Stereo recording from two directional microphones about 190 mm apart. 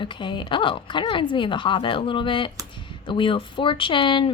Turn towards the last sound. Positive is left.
turn(degrees=25)  # may be behind; listen again after turning